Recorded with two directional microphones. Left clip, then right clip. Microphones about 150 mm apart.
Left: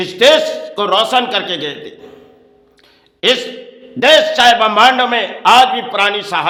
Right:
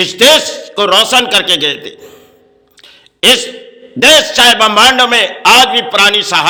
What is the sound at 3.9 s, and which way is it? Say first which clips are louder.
A man's voice: right 3 dB; 15° right (ahead or behind).